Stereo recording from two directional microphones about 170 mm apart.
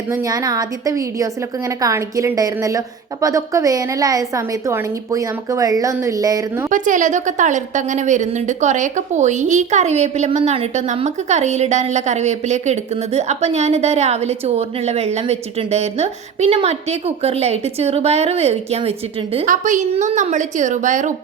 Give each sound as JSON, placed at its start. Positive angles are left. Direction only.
{"t": 0.1, "sound": "a woman's voice", "side_deg": -20}
{"t": 6.7, "sound": "a woman's voice", "side_deg": -50}
{"t": 19.5, "sound": "a woman's voice", "side_deg": -45}